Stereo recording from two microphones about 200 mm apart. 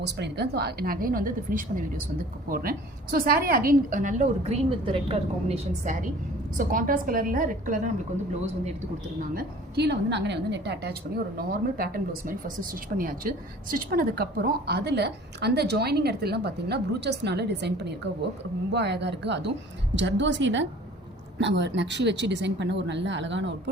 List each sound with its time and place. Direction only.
0.0 s speech: 55° right (ahead or behind); by 4.5 s 40° right (ahead or behind)
4.9 s a woman's voice: 30° right (ahead or behind)
9.3 s speech: 50° right (ahead or behind)